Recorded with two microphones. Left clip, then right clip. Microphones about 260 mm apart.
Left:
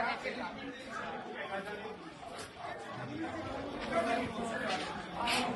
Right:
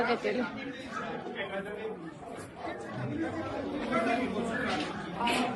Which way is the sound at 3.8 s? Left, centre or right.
Left.